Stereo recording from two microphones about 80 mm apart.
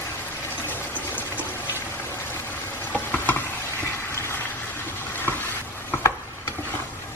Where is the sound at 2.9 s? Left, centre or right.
Left.